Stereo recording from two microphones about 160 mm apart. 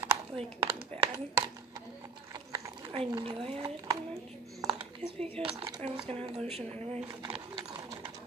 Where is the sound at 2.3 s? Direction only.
20° right (ahead or behind).